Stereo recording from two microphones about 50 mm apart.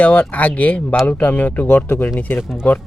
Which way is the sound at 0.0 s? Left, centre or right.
Left.